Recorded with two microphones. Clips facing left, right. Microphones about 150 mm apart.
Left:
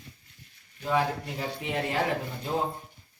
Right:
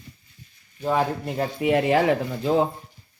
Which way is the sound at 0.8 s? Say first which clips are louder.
Right 4 dB; 50° right (ahead or behind).